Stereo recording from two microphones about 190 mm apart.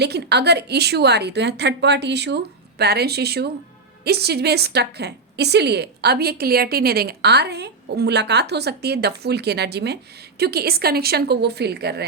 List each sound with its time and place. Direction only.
0.0 s a woman's voice: 60° right (ahead or behind)